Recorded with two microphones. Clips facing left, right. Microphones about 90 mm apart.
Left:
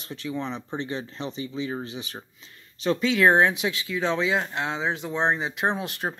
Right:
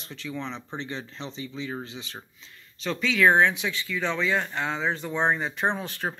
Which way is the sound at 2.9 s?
30° left (ahead or behind).